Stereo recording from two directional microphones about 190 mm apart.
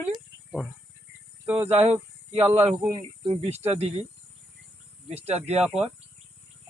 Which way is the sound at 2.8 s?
25° right (ahead or behind).